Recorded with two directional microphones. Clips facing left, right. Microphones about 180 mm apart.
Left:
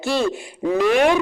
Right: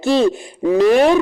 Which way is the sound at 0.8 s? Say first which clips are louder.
Right 4 dB; 35° right (ahead or behind).